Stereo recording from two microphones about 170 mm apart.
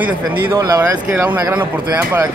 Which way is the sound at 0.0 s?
15° right (ahead or behind).